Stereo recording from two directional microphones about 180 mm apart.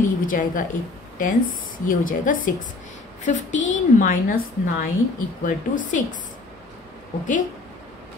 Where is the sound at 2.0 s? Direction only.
50° left (ahead or behind).